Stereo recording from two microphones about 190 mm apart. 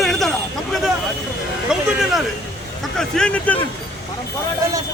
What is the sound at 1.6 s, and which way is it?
Speech, 5° right (ahead or behind).